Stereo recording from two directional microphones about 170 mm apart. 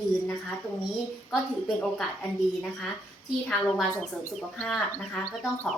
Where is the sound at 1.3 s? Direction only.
Centre (ahead or behind).